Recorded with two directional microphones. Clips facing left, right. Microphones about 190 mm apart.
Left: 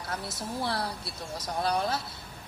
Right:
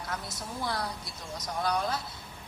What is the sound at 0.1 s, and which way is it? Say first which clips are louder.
Speech: left 5 dB; 30° left (ahead or behind).